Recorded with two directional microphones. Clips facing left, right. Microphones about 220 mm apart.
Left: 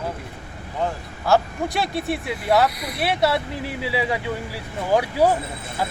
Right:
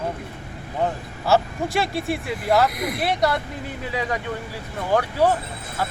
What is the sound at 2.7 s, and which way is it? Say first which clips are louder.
Speech: right 6 dB; 50° right (ahead or behind).